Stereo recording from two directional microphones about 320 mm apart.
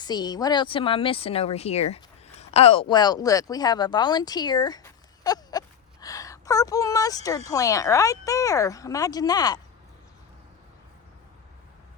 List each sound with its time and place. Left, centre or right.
0.0 s speech: centre